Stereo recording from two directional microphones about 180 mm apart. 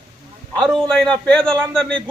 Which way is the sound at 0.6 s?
Centre (ahead or behind).